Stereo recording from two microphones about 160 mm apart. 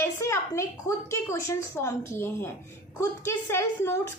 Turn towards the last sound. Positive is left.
turn(degrees=15)  # may be behind; listen again after turning